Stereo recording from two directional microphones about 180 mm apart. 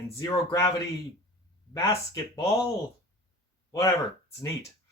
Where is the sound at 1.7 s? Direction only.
20° left (ahead or behind).